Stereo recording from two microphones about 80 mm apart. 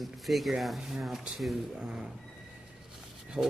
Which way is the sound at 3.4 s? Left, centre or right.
Centre.